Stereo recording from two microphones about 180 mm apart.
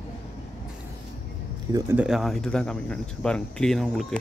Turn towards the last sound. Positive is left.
turn(degrees=0)  # may be behind; listen again after turning